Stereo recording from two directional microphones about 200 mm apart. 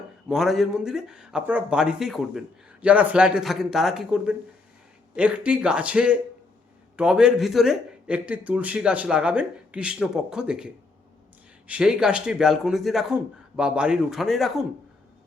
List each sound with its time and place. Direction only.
0.3 s a man's voice: centre (ahead or behind)
11.7 s a man's voice: 5° right (ahead or behind)